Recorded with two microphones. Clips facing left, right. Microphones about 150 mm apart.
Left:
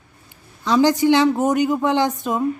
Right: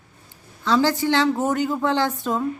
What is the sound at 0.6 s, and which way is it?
Speech, 15° left (ahead or behind).